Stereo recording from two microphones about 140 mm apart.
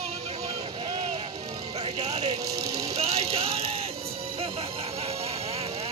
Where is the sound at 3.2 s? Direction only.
45° right (ahead or behind).